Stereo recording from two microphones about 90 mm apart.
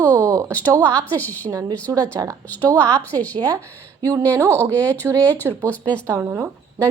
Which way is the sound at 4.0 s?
40° right (ahead or behind).